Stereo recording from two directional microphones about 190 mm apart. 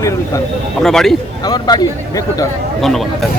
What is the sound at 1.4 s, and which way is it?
Speech, 20° left (ahead or behind).